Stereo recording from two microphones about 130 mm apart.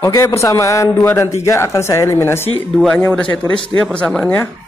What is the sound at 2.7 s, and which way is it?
Speech, 5° left (ahead or behind).